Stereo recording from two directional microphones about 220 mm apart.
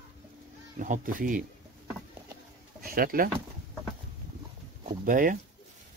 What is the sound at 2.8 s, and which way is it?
Speech, 40° right (ahead or behind).